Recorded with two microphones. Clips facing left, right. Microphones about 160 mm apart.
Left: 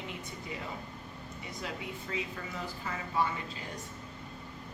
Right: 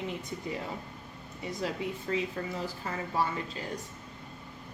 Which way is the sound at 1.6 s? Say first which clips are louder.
Right 6 dB; 35° right (ahead or behind).